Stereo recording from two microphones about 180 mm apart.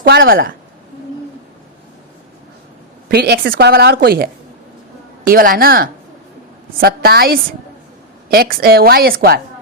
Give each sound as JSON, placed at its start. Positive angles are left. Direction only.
{"t": 0.0, "sound": "a woman's voice", "side_deg": -55}
{"t": 3.1, "sound": "a woman's voice", "side_deg": -60}